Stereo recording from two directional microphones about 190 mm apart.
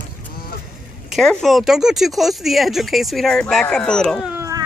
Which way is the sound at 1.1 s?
Centre (ahead or behind).